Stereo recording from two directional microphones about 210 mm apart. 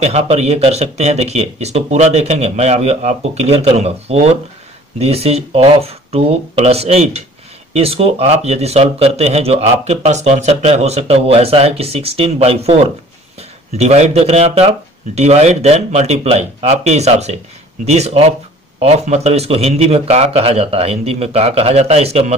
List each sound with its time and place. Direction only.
0.0 s speech: 30° right (ahead or behind)